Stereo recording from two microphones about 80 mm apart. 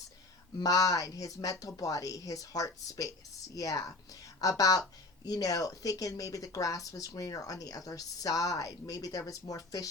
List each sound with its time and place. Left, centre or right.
0.6 s a woman's voice: left